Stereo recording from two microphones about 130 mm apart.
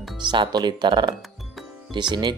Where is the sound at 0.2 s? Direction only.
35° right (ahead or behind).